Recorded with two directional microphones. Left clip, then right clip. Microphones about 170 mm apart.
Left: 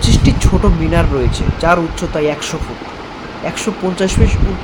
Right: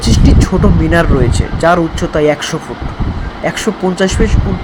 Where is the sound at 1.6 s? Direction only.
15° right (ahead or behind).